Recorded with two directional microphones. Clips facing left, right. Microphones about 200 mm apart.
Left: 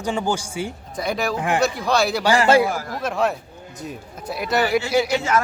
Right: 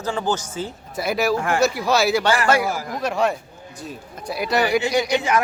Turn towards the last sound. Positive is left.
turn(degrees=5)  # may be behind; listen again after turning